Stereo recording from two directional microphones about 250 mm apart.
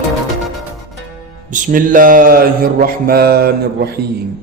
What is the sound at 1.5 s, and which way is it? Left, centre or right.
Mantra, right.